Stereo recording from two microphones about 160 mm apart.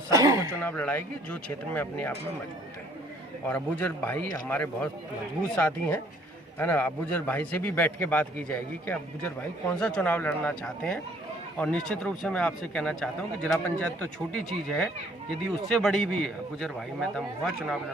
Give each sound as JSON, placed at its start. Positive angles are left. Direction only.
{"t": 0.1, "sound": "a sound", "side_deg": -20}
{"t": 0.6, "sound": "a man's voice", "side_deg": 10}
{"t": 3.4, "sound": "a man's voice", "side_deg": 10}